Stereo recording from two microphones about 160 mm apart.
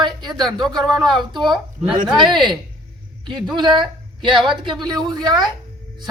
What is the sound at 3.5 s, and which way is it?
Speech, 30° right (ahead or behind).